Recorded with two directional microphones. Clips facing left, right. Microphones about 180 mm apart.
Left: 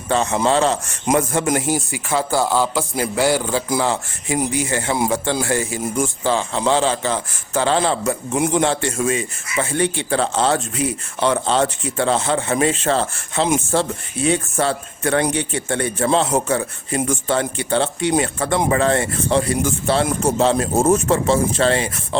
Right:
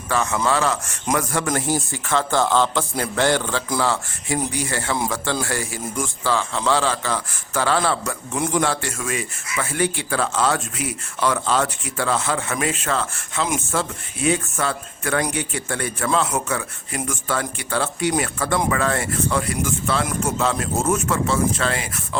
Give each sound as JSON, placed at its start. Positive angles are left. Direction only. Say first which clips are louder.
{"t": 0.1, "sound": "speech", "louder": "left 4 dB", "side_deg": 25}
{"t": 3.7, "sound": "speech", "louder": "left 2 dB", "side_deg": 20}